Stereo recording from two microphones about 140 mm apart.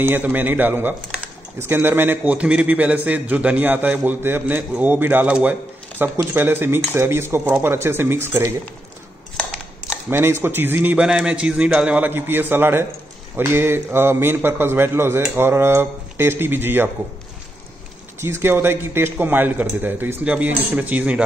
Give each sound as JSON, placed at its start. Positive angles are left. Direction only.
{"t": 0.0, "sound": "speech", "side_deg": -15}
{"t": 9.8, "sound": "speech", "side_deg": -15}
{"t": 18.2, "sound": "speech", "side_deg": -20}